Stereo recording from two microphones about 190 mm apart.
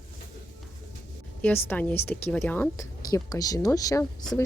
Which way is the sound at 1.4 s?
10° left (ahead or behind).